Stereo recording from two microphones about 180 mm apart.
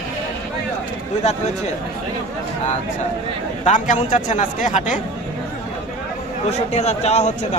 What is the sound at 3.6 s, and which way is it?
A man's voice, 45° left (ahead or behind).